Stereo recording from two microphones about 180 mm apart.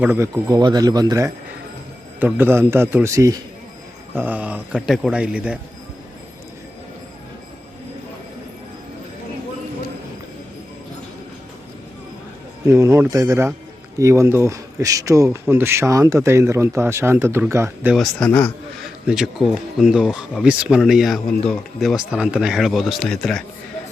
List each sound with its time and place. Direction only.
0.0 s speech: 10° right (ahead or behind)
12.6 s speech: 15° right (ahead or behind)
17.9 s a man's voice: centre (ahead or behind)
19.0 s speech: 5° right (ahead or behind)